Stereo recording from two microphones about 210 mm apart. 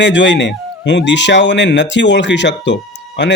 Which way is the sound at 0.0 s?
60° left (ahead or behind).